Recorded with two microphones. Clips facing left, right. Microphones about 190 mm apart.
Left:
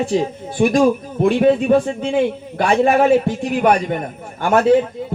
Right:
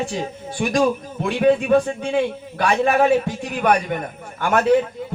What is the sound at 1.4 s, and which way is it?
A man's voice, 25° left (ahead or behind).